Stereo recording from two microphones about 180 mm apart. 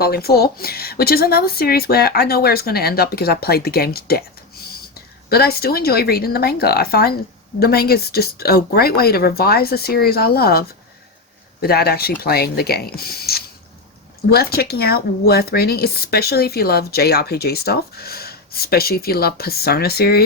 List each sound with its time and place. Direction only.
0.0 s speech: 60° left (ahead or behind)
5.3 s speech: 60° left (ahead or behind)